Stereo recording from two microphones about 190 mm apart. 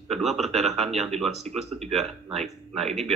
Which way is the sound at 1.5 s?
35° right (ahead or behind).